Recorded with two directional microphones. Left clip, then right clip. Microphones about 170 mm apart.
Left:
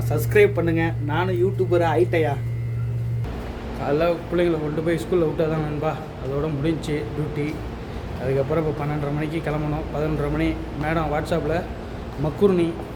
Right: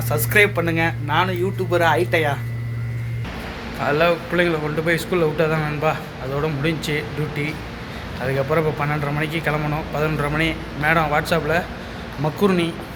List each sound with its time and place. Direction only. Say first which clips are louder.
0.1 s speech: right 1 dB; 10° left (ahead or behind)
3.8 s a man's voice: right 3 dB; 5° left (ahead or behind)